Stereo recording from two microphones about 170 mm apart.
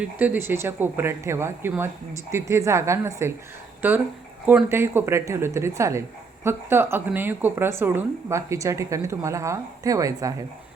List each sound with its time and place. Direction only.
0.0 s speech: 10° right (ahead or behind)